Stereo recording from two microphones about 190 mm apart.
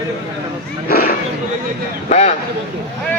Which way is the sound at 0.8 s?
50° left (ahead or behind).